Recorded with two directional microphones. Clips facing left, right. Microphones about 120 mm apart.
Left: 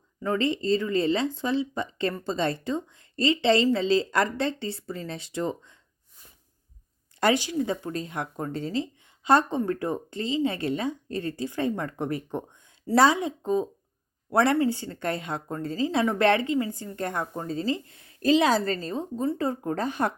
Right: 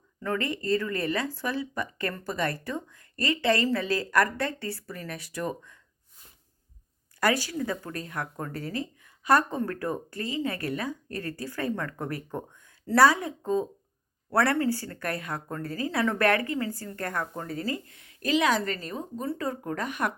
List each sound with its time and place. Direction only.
0.2 s a woman's voice: 20° left (ahead or behind)
7.2 s a woman's voice: 20° left (ahead or behind)